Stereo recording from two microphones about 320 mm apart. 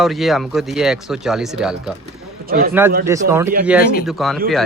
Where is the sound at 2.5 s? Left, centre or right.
Right.